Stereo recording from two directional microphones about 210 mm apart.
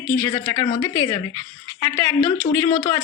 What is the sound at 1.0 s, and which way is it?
Speech, 20° left (ahead or behind).